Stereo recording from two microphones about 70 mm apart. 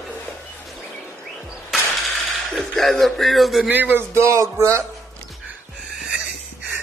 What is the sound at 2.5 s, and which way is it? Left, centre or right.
Speech, centre.